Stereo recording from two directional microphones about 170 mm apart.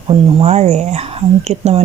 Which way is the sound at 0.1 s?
35° right (ahead or behind).